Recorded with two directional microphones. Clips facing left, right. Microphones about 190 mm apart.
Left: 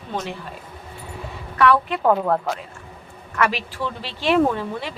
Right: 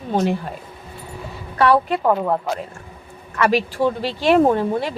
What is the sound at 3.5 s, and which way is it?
A woman's voice, 45° right (ahead or behind).